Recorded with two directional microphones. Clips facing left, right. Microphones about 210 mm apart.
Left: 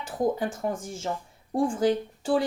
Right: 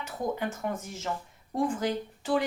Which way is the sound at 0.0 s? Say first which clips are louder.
Left 5 dB; 30° left (ahead or behind).